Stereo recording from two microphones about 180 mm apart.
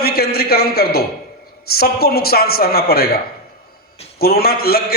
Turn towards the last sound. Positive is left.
turn(degrees=60)  # may be behind; listen again after turning